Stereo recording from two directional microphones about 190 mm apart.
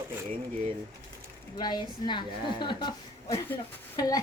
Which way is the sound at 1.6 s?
20° left (ahead or behind).